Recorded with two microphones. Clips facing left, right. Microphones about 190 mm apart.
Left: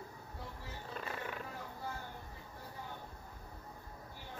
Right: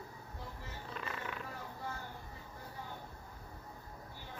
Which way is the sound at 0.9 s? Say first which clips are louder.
Left 1 dB; 45° left (ahead or behind).